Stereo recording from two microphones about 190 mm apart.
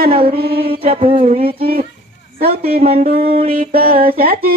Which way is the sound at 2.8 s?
50° right (ahead or behind).